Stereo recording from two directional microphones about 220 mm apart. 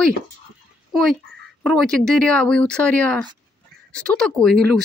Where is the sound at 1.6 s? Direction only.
Centre (ahead or behind).